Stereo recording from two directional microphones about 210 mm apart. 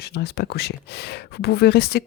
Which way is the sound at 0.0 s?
50° left (ahead or behind).